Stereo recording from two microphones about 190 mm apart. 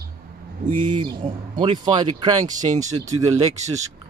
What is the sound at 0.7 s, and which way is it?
Speech, 25° right (ahead or behind).